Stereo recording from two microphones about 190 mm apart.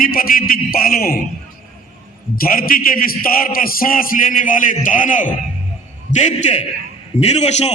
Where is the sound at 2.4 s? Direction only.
50° left (ahead or behind).